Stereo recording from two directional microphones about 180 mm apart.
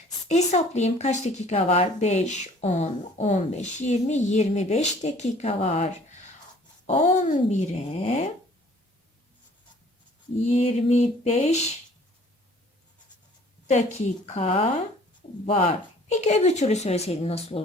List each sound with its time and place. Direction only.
0.3 s speech: 40° left (ahead or behind)
10.4 s speech: 35° left (ahead or behind)
13.7 s speech: 40° left (ahead or behind)